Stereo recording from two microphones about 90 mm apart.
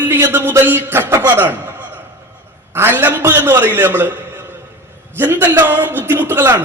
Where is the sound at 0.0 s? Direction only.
20° right (ahead or behind).